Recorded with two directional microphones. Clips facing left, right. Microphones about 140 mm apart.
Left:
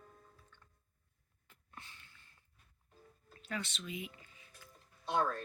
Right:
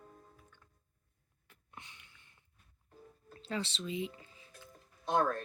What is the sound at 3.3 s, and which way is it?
Music, 30° right (ahead or behind).